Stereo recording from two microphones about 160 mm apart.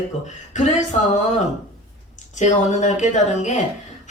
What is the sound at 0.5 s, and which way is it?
Speech, 50° left (ahead or behind).